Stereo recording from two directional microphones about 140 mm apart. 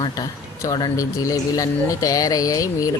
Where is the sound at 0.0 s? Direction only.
25° left (ahead or behind).